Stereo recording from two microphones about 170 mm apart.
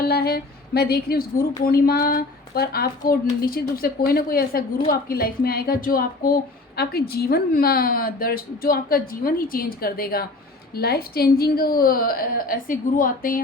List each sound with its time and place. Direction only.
0.1 s a woman's voice: 65° left (ahead or behind)